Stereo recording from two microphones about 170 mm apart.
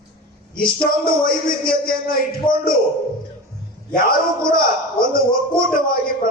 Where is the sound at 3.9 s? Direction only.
60° left (ahead or behind).